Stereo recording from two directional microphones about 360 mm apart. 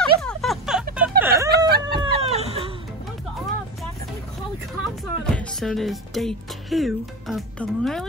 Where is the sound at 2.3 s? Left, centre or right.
Centre.